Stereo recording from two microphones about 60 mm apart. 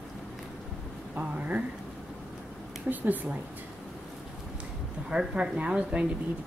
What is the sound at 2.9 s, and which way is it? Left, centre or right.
Speech, right.